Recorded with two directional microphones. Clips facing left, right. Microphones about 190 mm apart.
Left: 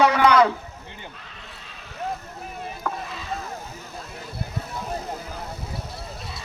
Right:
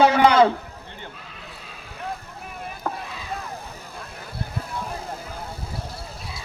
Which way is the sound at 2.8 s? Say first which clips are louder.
Right 1 dB; 30° right (ahead or behind).